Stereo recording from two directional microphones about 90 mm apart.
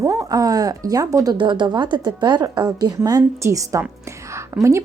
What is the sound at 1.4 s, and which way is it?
A woman's voice, 60° right (ahead or behind).